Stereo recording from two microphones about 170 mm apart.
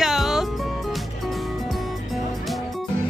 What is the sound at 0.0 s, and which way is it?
Music, centre (ahead or behind).